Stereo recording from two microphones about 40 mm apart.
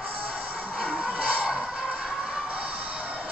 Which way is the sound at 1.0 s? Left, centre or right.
Right.